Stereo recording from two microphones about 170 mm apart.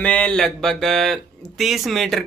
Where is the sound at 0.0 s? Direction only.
5° left (ahead or behind).